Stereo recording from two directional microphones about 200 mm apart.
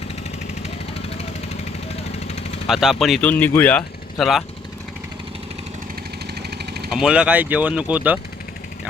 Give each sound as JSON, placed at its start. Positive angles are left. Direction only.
{"t": 2.1, "sound": "vehicle", "side_deg": 30}
{"t": 2.6, "sound": "speech", "side_deg": 0}
{"t": 6.4, "sound": "vehicle", "side_deg": -55}
{"t": 6.9, "sound": "speech", "side_deg": -5}